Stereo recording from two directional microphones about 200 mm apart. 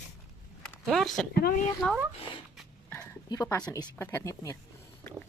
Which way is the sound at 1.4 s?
45° left (ahead or behind).